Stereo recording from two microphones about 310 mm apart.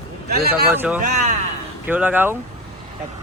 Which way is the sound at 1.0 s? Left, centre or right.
Right.